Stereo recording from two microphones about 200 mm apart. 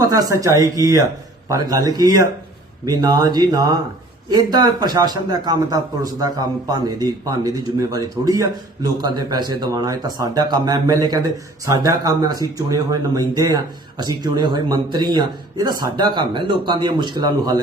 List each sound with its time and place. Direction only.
0.0 s speech: 15° right (ahead or behind)